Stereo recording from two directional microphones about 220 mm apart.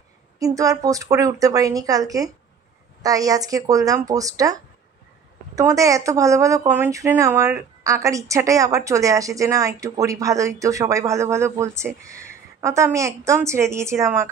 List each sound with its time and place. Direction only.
0.4 s speech: 15° right (ahead or behind)
5.6 s speech: 15° right (ahead or behind)